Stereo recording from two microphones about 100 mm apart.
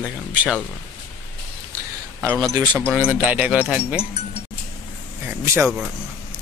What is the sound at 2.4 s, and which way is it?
Speech, 35° right (ahead or behind).